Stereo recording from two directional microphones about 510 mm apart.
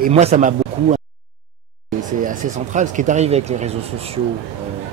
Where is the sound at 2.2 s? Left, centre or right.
Centre.